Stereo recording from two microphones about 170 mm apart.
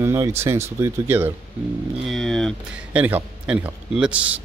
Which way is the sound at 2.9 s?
10° right (ahead or behind).